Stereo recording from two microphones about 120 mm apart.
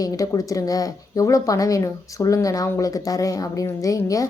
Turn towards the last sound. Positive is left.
turn(degrees=30)  # may be behind; listen again after turning